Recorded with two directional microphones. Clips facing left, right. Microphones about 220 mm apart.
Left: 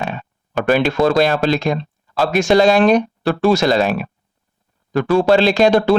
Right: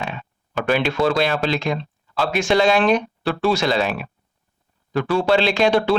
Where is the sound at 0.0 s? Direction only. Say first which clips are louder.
Left 5 dB; 40° left (ahead or behind).